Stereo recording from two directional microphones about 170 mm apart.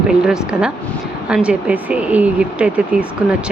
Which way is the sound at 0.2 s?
5° right (ahead or behind).